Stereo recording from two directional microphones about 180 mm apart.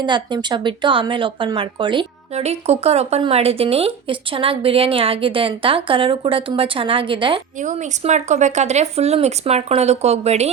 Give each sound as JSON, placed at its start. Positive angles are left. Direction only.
{"t": 0.0, "sound": "speech", "side_deg": -25}
{"t": 7.6, "sound": "speech", "side_deg": -45}